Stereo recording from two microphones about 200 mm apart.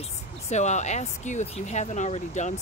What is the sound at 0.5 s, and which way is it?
Speech, 35° left (ahead or behind).